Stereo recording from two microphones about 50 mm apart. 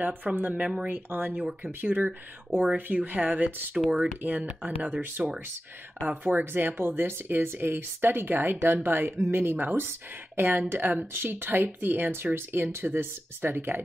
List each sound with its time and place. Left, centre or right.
0.0 s speech: right
2.5 s speech: right
2.9 s speech: right
3.7 s speech: centre
5.2 s speech: centre
6.2 s speech: right